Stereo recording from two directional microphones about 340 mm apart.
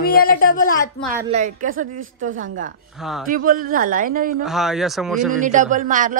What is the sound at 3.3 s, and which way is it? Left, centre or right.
Speech, right.